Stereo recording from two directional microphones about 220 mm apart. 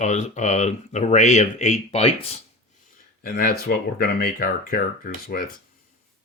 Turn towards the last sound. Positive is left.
turn(degrees=40)  # may be behind; listen again after turning